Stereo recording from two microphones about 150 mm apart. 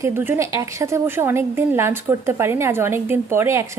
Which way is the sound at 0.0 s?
20° right (ahead or behind).